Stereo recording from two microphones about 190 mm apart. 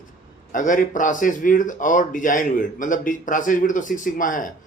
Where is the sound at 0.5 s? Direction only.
45° left (ahead or behind).